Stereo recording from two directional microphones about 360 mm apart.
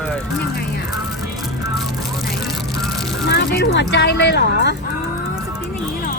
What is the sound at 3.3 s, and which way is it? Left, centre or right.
Speech, left.